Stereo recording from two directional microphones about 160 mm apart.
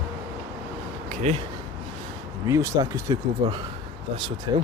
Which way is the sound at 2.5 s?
20° right (ahead or behind).